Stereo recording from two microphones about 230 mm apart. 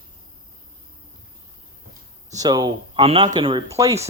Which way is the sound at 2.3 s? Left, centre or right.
Centre.